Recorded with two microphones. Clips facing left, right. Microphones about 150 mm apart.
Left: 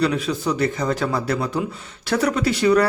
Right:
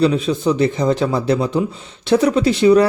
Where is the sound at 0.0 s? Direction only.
25° right (ahead or behind).